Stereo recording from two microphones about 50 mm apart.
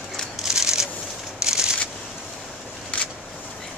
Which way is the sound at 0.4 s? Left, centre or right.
Centre.